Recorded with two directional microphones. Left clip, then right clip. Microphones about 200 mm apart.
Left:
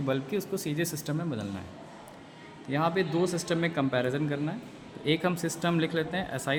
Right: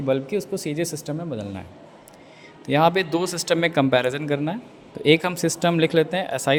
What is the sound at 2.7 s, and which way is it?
A man's voice, 40° right (ahead or behind).